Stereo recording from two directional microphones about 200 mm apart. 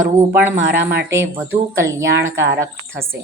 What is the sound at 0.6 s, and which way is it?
Speech, 60° right (ahead or behind).